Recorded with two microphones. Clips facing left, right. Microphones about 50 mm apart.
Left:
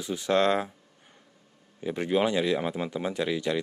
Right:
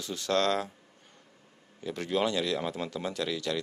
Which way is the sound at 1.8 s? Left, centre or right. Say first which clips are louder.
Left 4 dB; left.